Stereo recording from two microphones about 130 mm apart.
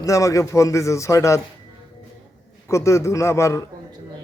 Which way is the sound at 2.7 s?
20° left (ahead or behind).